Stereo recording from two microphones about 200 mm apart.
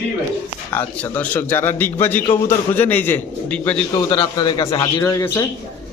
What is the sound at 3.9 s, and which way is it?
A man's voice, 20° left (ahead or behind).